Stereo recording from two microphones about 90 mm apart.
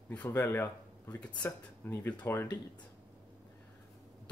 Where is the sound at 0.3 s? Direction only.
25° left (ahead or behind).